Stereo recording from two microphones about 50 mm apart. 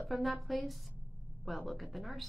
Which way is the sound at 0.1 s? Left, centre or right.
Centre.